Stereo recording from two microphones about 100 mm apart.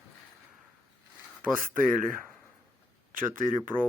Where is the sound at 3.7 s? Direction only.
15° right (ahead or behind).